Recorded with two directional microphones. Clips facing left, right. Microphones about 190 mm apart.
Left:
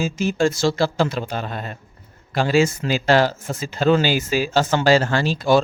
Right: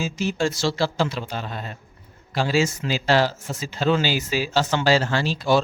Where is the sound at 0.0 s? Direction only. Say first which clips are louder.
Left 4 dB; 50° left (ahead or behind).